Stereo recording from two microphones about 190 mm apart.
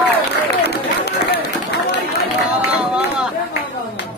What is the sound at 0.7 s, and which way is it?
Run, 60° left (ahead or behind).